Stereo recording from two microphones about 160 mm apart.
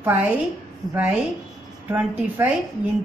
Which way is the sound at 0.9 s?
10° right (ahead or behind).